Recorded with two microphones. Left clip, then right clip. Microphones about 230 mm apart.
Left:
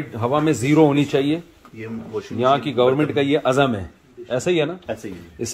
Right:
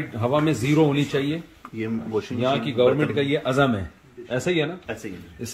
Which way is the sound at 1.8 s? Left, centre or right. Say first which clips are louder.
Right 2 dB; right.